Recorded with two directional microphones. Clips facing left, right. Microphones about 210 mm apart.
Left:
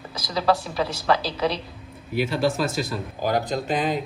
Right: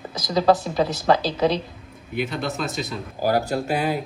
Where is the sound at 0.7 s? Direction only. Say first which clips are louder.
Right 4 dB; 30° right (ahead or behind).